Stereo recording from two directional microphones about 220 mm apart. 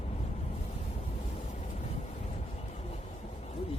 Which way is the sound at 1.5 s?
30° left (ahead or behind).